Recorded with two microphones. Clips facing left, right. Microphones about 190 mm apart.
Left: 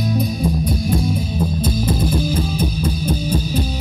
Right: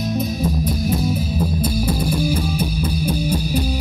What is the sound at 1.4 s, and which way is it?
Music, 10° right (ahead or behind).